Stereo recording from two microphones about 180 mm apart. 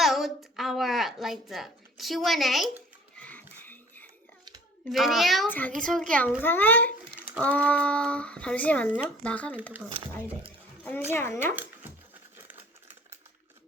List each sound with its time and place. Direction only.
0.0 s a woman's voice: centre (ahead or behind)
3.2 s a sound: 10° left (ahead or behind)
4.9 s a child's voice: centre (ahead or behind)
11.1 s speech: 10° left (ahead or behind)
11.5 s dog: 10° right (ahead or behind)